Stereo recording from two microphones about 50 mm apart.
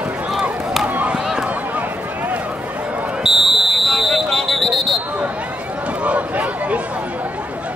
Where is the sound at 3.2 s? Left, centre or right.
Centre.